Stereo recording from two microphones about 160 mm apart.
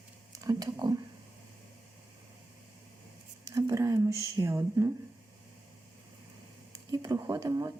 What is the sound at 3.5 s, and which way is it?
A woman's voice, 20° right (ahead or behind).